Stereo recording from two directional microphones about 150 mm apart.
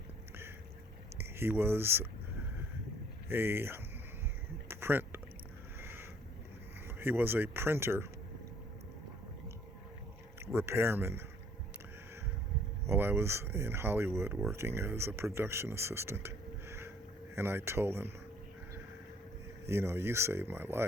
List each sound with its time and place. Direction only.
1.2 s speech: 15° right (ahead or behind)
3.2 s speech: 15° right (ahead or behind)
4.7 s a sound: 15° right (ahead or behind)
5.8 s boat: 15° right (ahead or behind)
6.8 s speech: 15° right (ahead or behind)
10.4 s speech: 15° right (ahead or behind)
12.9 s speech: 15° right (ahead or behind)
19.6 s speech: 15° right (ahead or behind)